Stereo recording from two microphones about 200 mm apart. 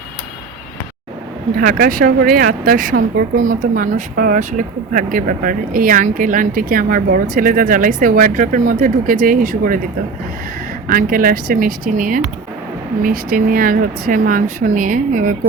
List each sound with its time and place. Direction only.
1.5 s speech: 45° right (ahead or behind)
10.8 s speech: 45° right (ahead or behind)